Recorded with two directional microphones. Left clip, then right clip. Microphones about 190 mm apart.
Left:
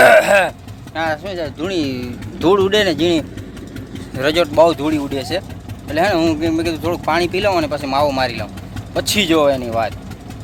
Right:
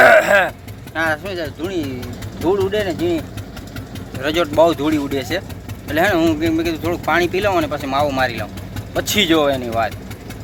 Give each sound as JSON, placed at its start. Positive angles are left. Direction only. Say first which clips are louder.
{"t": 0.0, "sound": "a sound", "louder": "left 1 dB", "side_deg": 15}
{"t": 1.6, "sound": "speech", "louder": "left 4 dB", "side_deg": 65}
{"t": 2.4, "sound": "speech", "louder": "left 5 dB", "side_deg": 80}
{"t": 4.5, "sound": "speech", "louder": "right 1 dB", "side_deg": 15}